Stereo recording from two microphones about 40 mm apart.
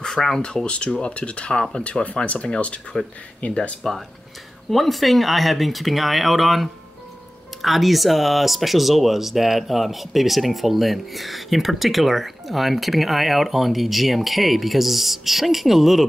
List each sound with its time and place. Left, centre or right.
0.0 s a sound: centre
0.7 s speech: left
3.4 s speech: left
3.8 s speech: centre